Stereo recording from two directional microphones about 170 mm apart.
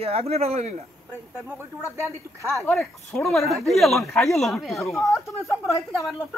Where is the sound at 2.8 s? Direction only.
15° left (ahead or behind).